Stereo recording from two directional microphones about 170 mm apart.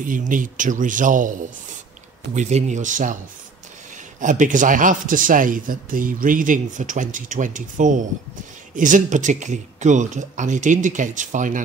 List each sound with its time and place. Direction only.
0.0 s a man's voice: 50° right (ahead or behind)
4.2 s a man's voice: 50° right (ahead or behind)